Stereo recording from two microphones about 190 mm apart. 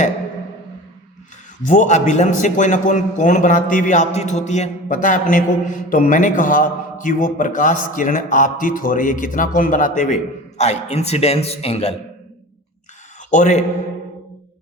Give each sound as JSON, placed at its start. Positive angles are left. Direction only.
{"t": 1.6, "sound": "a man's voice", "side_deg": 40}
{"t": 13.3, "sound": "a man's voice", "side_deg": 40}